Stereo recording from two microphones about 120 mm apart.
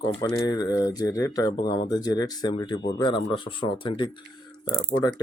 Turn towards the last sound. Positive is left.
turn(degrees=35)  # may be behind; listen again after turning